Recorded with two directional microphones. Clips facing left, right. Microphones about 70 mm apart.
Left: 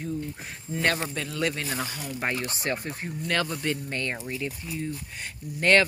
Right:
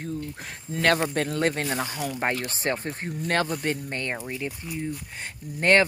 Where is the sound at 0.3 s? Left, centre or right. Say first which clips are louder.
Right 1 dB; right.